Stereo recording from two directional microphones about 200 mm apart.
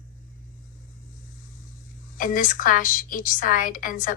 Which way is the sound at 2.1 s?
40° left (ahead or behind).